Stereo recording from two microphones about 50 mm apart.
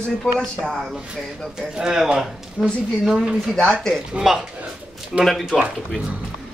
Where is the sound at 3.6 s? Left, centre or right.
Centre.